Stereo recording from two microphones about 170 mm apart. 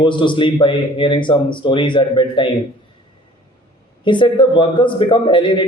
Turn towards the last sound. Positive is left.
turn(degrees=30)  # may be behind; listen again after turning